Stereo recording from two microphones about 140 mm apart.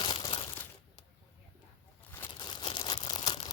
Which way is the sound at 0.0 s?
35° left (ahead or behind).